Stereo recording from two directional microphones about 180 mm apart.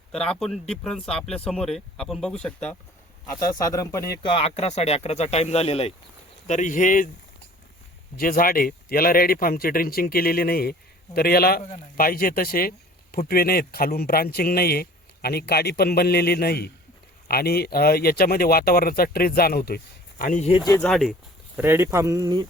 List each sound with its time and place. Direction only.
0.3 s speech: centre (ahead or behind)
3.4 s speech: 20° left (ahead or behind)
4.3 s speech: 35° left (ahead or behind)
6.5 s speech: 45° left (ahead or behind)
8.1 s speech: 55° left (ahead or behind)
20.8 s speech: centre (ahead or behind)
21.6 s speech: 15° right (ahead or behind)